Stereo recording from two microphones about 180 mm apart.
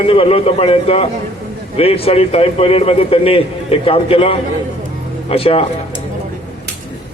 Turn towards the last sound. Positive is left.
turn(degrees=30)  # may be behind; listen again after turning